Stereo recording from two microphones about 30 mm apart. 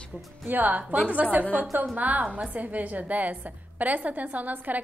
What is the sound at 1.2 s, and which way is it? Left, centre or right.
A woman's voice, right.